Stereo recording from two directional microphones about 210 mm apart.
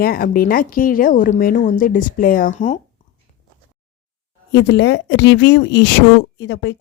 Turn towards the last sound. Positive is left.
turn(degrees=55)  # may be behind; listen again after turning